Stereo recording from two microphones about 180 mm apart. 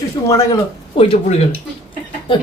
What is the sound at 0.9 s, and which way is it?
Speech, 35° left (ahead or behind).